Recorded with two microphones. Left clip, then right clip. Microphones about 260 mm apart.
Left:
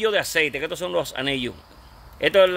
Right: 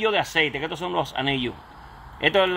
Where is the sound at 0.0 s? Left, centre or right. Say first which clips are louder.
Left 1 dB; left.